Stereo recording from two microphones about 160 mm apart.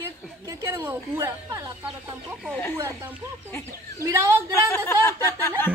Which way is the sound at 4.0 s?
20° right (ahead or behind).